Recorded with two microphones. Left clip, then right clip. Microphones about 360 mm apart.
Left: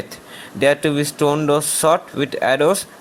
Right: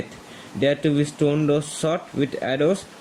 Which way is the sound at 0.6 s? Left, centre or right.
Centre.